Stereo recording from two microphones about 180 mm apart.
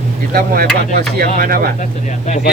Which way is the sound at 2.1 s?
40° left (ahead or behind).